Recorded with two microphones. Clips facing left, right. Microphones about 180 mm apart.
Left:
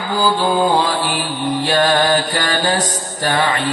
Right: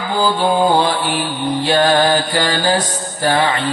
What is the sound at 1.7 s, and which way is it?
A man's voice, 30° right (ahead or behind).